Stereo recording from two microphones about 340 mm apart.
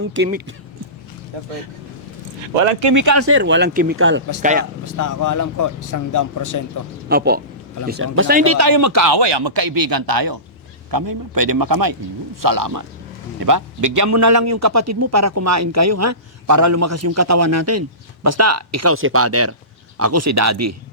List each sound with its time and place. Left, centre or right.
0.1 s speech: right
2.9 s speech: right
3.2 s speech: right
4.4 s speech: right
4.9 s speech: left
7.1 s speech: right
8.6 s speech: right
9.0 s speech: right
10.9 s a man's voice: right